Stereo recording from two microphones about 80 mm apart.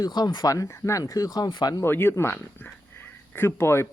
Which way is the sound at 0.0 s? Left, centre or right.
Left.